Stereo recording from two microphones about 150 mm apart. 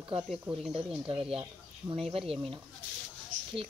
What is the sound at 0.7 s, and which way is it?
Speech, 40° right (ahead or behind).